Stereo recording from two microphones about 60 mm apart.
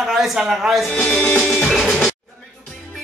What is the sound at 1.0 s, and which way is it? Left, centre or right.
Music, centre.